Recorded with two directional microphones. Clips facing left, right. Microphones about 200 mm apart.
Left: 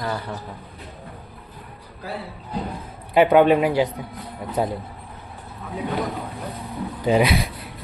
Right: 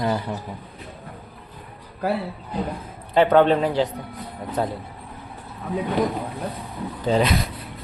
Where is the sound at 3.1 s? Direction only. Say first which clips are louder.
Left 1 dB; 10° left (ahead or behind).